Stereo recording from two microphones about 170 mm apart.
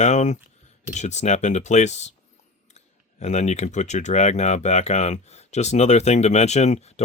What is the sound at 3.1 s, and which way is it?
Speech, 40° left (ahead or behind).